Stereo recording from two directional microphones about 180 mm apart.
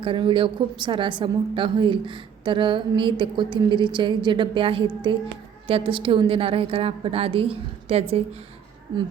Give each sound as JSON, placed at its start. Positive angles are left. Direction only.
{"t": 0.0, "sound": "a woman's voice", "side_deg": -25}